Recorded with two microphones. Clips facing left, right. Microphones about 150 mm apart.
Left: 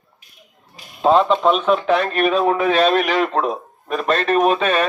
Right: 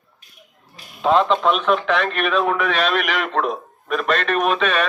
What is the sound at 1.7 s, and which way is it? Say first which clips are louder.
A man's voice: left 2 dB; 35° left (ahead or behind).